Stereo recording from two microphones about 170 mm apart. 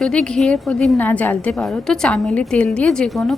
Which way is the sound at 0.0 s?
5° left (ahead or behind).